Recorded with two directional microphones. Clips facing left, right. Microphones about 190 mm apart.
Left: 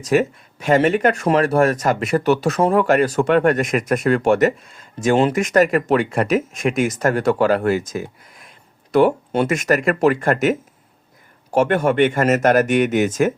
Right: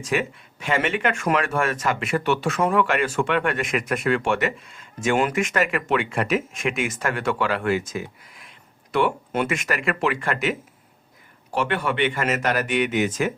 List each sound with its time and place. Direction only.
0.0 s speech: 40° left (ahead or behind)